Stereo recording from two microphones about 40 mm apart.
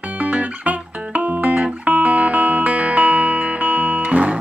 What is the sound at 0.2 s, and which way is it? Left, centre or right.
Music, right.